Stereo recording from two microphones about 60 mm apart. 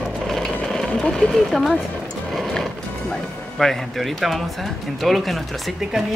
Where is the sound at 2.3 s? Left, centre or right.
Centre.